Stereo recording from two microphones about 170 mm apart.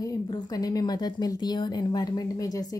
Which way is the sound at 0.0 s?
20° left (ahead or behind).